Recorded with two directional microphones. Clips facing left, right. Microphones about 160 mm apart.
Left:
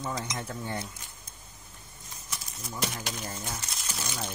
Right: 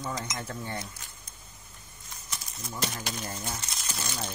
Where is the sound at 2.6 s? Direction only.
10° left (ahead or behind).